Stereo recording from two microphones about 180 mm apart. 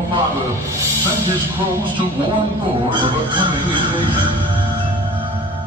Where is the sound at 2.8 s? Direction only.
25° right (ahead or behind).